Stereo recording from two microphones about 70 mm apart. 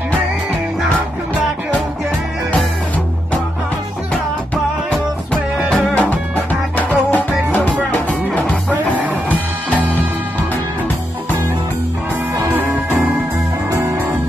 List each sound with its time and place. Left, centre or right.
5.9 s music: left